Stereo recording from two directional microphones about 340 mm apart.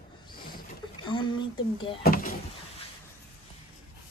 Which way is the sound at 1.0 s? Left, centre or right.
Centre.